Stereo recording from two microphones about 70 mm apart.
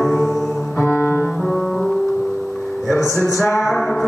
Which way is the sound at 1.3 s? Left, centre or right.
Centre.